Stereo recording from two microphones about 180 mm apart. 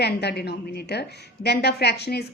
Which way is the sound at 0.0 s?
65° left (ahead or behind).